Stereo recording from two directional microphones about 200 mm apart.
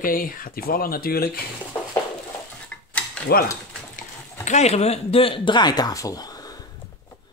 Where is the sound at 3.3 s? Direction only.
50° left (ahead or behind).